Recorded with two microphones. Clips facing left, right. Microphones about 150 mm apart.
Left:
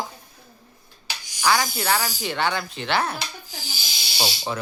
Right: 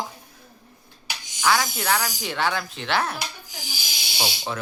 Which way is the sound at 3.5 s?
15° right (ahead or behind).